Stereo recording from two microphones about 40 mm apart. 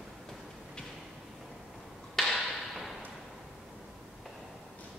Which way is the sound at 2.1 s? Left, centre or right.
Centre.